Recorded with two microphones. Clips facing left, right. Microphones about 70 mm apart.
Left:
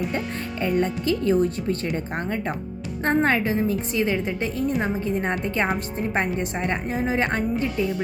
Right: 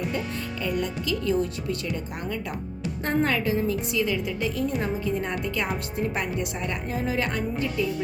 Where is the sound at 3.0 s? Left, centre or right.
Left.